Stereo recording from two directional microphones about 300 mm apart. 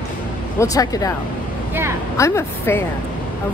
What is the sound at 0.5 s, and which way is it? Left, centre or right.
Speech, centre.